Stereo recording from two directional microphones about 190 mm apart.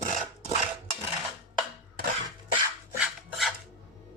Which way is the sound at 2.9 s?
Centre (ahead or behind).